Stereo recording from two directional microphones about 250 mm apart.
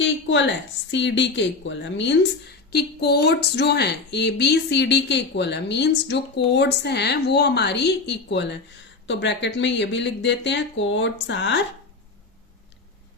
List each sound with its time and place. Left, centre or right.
0.0 s a woman's voice: left